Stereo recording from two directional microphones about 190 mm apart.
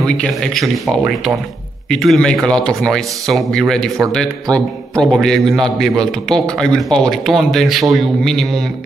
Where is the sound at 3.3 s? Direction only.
Centre (ahead or behind).